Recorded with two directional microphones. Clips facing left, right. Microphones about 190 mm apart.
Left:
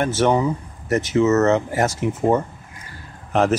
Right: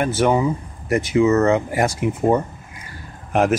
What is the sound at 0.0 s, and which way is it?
Speech, 10° right (ahead or behind).